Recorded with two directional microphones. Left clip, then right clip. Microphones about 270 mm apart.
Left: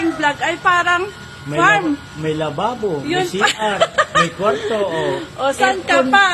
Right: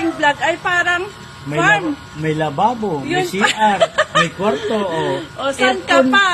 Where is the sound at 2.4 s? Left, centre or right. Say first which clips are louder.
Right 5 dB; right.